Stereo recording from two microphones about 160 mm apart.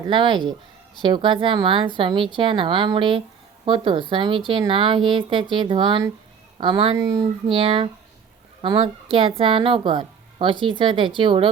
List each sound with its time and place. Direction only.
0.1 s a woman's voice: 30° right (ahead or behind)